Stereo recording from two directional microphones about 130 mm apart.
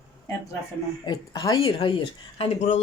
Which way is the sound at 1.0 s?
30° left (ahead or behind).